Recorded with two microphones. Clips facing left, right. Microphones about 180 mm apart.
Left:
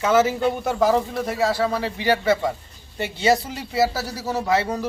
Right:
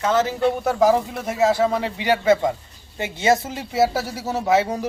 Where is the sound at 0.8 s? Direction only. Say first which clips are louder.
Right 1 dB; 10° right (ahead or behind).